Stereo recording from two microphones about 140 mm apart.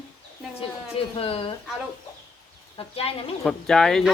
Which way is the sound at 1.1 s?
40° left (ahead or behind).